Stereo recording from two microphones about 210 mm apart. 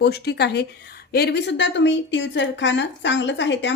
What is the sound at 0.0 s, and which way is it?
A woman's voice, 50° left (ahead or behind).